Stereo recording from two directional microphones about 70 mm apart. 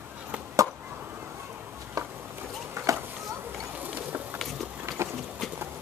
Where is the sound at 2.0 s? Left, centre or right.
Right.